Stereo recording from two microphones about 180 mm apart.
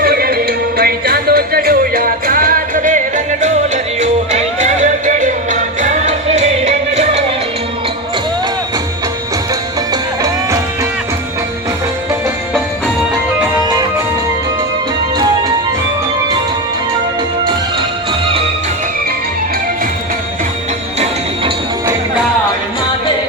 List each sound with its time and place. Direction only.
0.0 s music: 60° right (ahead or behind)
4.0 s music: 40° right (ahead or behind)
9.9 s music: 20° right (ahead or behind)